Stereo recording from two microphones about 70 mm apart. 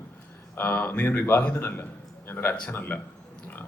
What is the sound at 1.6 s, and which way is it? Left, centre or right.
A man's voice, left.